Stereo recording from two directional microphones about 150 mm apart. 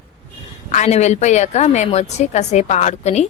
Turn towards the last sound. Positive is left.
turn(degrees=50)  # may be behind; listen again after turning